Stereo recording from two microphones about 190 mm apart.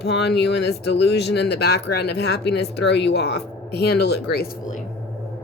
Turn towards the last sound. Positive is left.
turn(degrees=60)  # may be behind; listen again after turning